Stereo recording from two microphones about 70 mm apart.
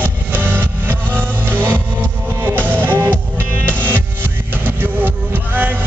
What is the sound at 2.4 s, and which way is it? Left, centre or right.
Music, right.